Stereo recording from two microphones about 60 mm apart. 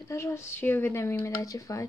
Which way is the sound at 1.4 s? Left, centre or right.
Left.